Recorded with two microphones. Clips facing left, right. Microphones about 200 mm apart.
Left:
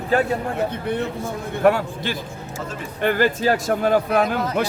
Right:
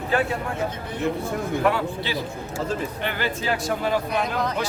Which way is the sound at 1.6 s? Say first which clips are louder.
Left 7 dB; 45° left (ahead or behind).